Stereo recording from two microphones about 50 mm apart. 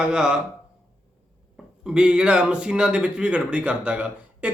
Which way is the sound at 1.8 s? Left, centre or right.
Centre.